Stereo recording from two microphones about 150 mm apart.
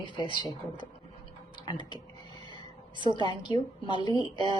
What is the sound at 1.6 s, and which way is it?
Speech, 30° left (ahead or behind).